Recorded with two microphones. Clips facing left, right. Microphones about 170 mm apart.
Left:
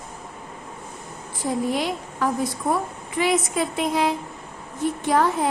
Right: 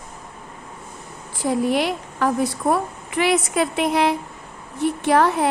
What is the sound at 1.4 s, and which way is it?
A woman's voice, 70° right (ahead or behind).